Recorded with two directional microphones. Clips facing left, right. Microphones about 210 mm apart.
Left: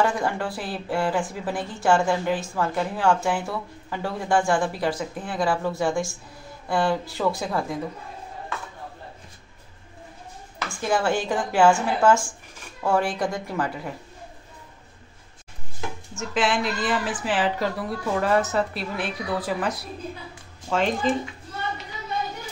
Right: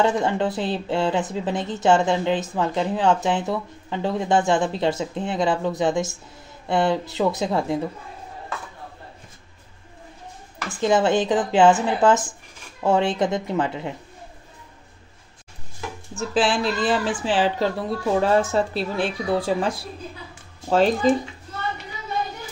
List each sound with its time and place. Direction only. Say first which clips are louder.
0.0 s a woman's voice: right 3 dB; 20° right (ahead or behind)
10.7 s a woman's voice: right 5 dB; 20° right (ahead or behind)
16.2 s a woman's voice: right 3 dB; 30° right (ahead or behind)